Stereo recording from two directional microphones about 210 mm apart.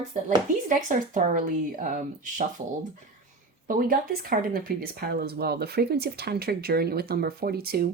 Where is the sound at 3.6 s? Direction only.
40° right (ahead or behind).